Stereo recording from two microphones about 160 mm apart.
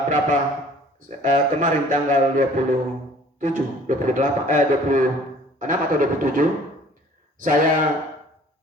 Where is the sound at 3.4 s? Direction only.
50° right (ahead or behind).